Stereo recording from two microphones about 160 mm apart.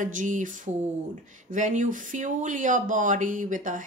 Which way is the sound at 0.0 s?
55° right (ahead or behind).